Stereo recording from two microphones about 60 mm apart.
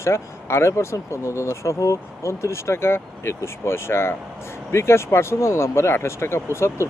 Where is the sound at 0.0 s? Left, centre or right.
Left.